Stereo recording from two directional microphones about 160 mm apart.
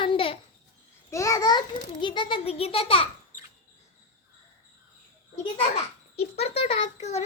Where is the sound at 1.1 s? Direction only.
20° left (ahead or behind); by 3.1 s 35° left (ahead or behind).